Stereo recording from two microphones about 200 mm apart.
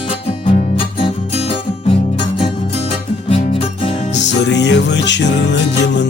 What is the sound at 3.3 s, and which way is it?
Music, 30° left (ahead or behind).